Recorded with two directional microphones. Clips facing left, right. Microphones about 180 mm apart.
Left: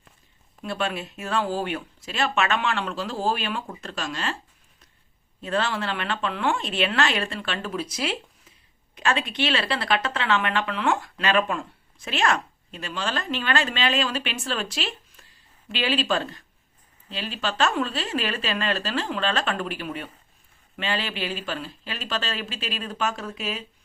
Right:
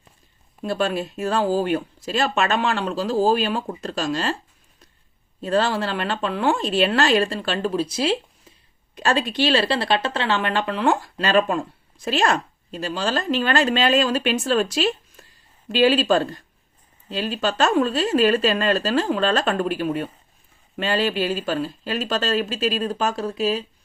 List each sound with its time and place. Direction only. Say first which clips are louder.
0.6 s speech: right 6 dB; 35° right (ahead or behind)
5.4 s speech: right 5 dB; 35° right (ahead or behind)